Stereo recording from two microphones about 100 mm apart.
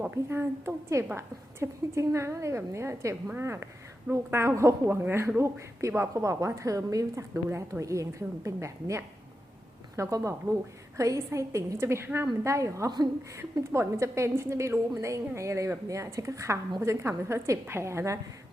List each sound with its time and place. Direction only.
0.0 s a woman's voice: 20° right (ahead or behind)